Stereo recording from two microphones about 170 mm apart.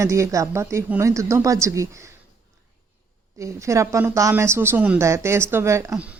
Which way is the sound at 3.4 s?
15° right (ahead or behind).